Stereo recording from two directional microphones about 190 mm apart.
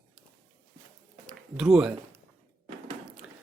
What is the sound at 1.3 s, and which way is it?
Speech, 5° right (ahead or behind).